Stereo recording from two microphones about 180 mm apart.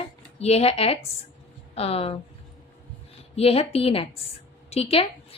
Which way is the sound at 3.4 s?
35° left (ahead or behind).